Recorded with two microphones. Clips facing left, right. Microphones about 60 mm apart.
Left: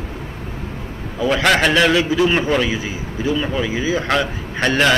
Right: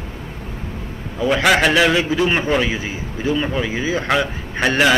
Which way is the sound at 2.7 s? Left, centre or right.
Right.